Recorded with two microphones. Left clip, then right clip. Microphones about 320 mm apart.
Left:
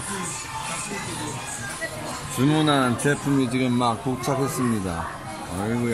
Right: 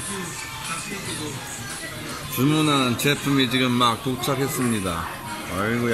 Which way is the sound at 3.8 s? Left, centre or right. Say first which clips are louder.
Right 3 dB; right.